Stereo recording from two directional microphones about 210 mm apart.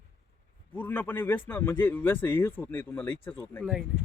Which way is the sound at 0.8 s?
10° left (ahead or behind).